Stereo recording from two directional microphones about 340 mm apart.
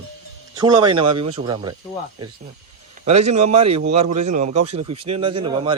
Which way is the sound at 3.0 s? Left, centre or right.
Centre.